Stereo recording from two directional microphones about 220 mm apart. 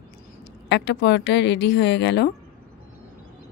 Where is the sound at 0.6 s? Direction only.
50° left (ahead or behind).